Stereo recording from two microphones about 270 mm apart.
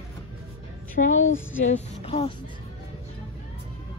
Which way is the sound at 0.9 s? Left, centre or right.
Left.